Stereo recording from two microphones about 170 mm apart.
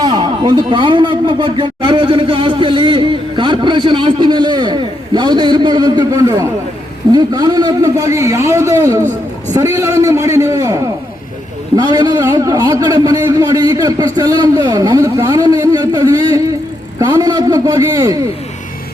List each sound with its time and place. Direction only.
0.0 s a man's voice: 25° right (ahead or behind)